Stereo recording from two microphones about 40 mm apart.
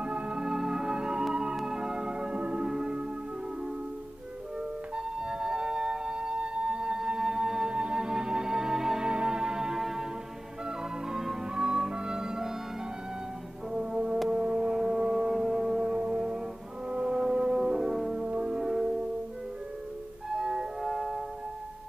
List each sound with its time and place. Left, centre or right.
0.0 s music: right
4.9 s music: centre
9.0 s music: right
11.1 s music: centre
13.7 s brass instrument: right
14.3 s shofar: centre
15.8 s music: right
18.1 s music: right
20.3 s music: centre
20.8 s music: centre